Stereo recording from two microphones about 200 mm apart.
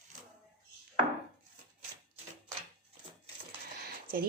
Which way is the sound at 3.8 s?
45° right (ahead or behind).